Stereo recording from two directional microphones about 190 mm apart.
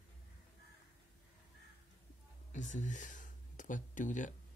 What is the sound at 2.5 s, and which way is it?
Speech, 40° left (ahead or behind).